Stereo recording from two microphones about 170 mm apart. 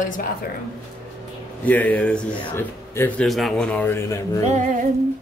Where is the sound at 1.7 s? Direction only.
10° left (ahead or behind).